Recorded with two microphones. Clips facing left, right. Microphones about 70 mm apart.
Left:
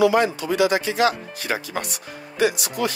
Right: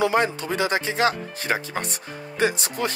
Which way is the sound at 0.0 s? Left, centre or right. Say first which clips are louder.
Left 3 dB; right.